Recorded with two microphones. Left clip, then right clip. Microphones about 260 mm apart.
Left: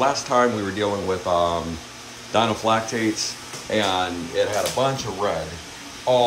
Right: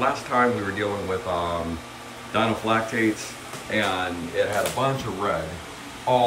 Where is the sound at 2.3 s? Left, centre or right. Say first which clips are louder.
Left 3 dB; centre.